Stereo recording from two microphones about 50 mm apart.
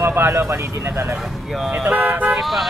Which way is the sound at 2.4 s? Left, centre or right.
Centre.